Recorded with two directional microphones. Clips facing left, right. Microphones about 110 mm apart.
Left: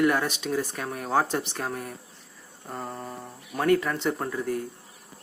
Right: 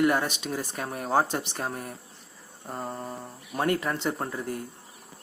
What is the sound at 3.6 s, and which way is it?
Speech, 15° right (ahead or behind).